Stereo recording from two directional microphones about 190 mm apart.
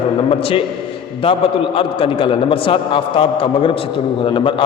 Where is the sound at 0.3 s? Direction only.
30° left (ahead or behind).